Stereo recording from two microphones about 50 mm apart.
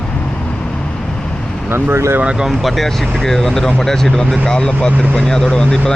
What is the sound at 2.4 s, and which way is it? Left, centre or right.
Speech, centre.